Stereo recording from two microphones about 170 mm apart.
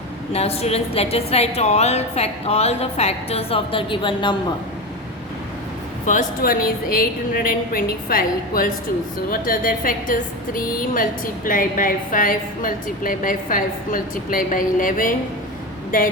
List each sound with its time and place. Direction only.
0.3 s a woman's voice: 35° left (ahead or behind)
6.1 s a woman's voice: 55° left (ahead or behind)